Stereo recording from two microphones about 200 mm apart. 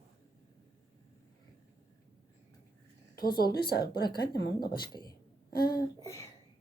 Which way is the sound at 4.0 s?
20° left (ahead or behind).